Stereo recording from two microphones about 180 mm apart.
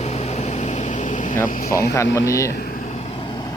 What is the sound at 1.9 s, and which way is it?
Speech, 15° left (ahead or behind).